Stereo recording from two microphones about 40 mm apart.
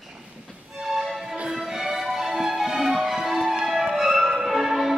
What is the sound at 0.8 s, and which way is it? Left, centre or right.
Music, centre.